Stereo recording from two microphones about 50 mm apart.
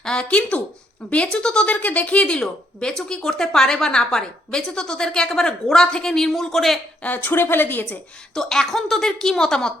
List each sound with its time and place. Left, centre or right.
0.0 s speech: centre
0.5 s a woman's voice: left; by 6.7 s centre
7.2 s a woman's voice: left
8.4 s speech: centre